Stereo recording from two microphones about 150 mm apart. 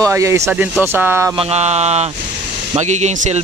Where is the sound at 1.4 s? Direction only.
45° right (ahead or behind).